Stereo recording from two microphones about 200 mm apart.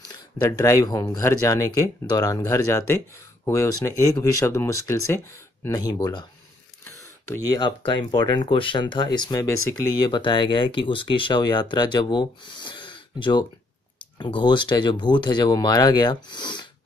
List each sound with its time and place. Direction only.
0.1 s speech: 15° left (ahead or behind)
7.4 s speech: 20° left (ahead or behind)